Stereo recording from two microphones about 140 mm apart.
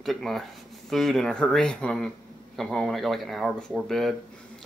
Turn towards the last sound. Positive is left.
turn(degrees=0)  # may be behind; listen again after turning